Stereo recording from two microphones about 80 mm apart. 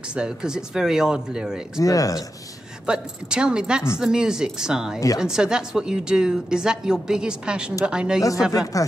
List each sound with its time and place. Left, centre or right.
0.1 s a woman's voice: centre
1.8 s speech: left
2.9 s a woman's voice: centre
8.5 s speech: left